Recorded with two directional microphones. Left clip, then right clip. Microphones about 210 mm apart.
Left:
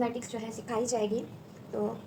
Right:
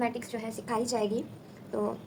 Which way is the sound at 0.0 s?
40° right (ahead or behind).